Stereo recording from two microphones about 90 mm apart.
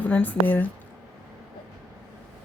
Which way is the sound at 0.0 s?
20° left (ahead or behind).